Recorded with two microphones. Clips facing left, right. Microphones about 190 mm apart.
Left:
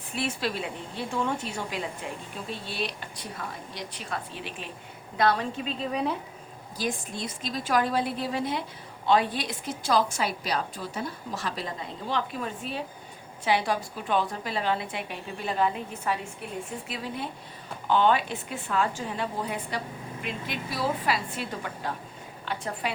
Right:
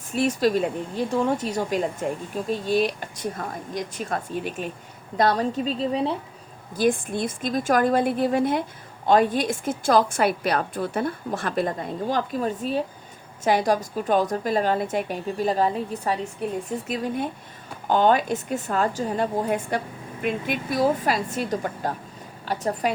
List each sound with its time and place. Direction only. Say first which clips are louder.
0.1 s a woman's voice: right 9 dB; 40° right (ahead or behind)
6.7 s a woman's voice: right 10 dB; 55° right (ahead or behind)